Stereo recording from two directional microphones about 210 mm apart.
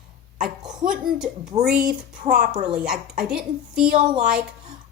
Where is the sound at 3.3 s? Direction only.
5° right (ahead or behind).